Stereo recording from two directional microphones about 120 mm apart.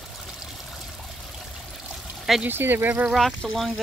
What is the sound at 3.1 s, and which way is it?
Speech, centre (ahead or behind).